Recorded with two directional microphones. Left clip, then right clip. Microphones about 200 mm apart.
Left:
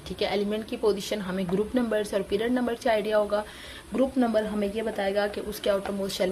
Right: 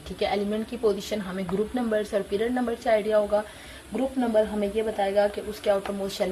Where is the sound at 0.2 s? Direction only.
45° left (ahead or behind).